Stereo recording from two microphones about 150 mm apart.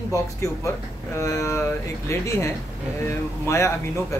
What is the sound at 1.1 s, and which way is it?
Speech, 20° left (ahead or behind).